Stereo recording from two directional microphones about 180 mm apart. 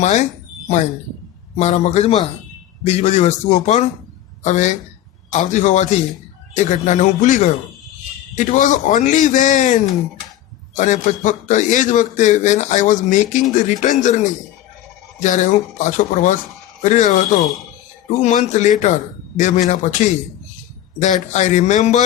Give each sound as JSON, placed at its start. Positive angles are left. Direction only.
{"t": 0.0, "sound": "speech", "side_deg": 40}
{"t": 1.5, "sound": "a man's voice", "side_deg": 40}